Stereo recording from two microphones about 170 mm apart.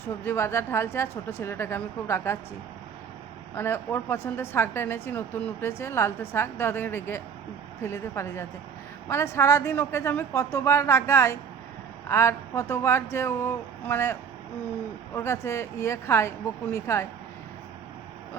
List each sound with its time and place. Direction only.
0.0 s a woman's voice: 15° left (ahead or behind)
3.5 s a woman's voice: 15° left (ahead or behind)